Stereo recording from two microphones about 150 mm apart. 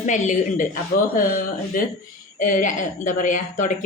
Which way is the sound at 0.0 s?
55° left (ahead or behind).